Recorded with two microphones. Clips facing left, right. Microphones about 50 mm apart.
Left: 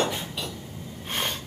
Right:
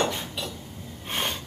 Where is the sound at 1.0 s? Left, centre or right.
Centre.